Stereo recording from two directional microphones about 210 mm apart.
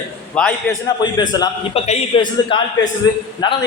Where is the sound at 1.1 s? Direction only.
20° left (ahead or behind).